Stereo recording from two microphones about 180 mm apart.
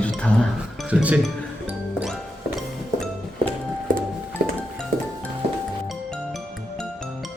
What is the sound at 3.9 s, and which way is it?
Music, 45° right (ahead or behind).